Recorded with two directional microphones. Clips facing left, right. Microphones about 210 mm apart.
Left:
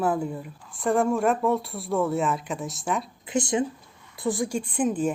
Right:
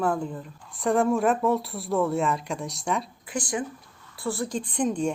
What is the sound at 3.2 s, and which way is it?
Speech, 25° left (ahead or behind).